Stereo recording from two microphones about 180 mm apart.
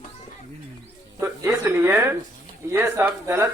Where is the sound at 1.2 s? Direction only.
10° right (ahead or behind).